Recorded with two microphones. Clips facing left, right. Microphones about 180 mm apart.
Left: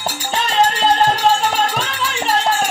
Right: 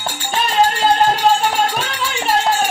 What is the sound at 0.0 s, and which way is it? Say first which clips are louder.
Music: even; 20° left (ahead or behind).